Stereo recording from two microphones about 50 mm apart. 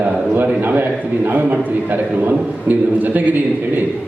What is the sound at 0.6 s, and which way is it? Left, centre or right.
A man's voice, right.